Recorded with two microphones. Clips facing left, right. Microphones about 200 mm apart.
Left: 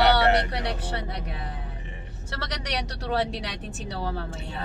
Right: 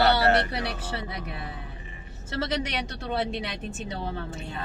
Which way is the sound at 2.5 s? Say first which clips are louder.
Right 2 dB; centre (ahead or behind).